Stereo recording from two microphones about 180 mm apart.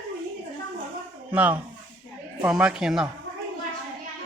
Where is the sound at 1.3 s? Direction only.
10° right (ahead or behind).